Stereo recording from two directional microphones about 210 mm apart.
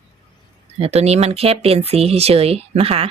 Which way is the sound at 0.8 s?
30° right (ahead or behind).